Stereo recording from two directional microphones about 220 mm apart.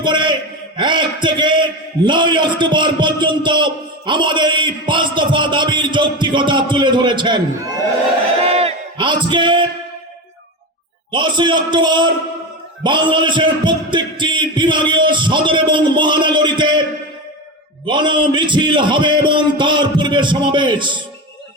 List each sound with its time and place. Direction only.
0.0 s a man's voice: 20° right (ahead or behind)
8.4 s a sound: 25° right (ahead or behind)
11.1 s a man's voice: 20° right (ahead or behind)
17.8 s a man's voice: 20° right (ahead or behind)